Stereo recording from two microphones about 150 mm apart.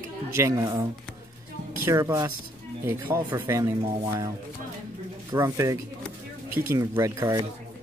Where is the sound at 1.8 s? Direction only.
20° right (ahead or behind).